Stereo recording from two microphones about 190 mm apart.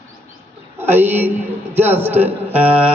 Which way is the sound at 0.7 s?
10° right (ahead or behind).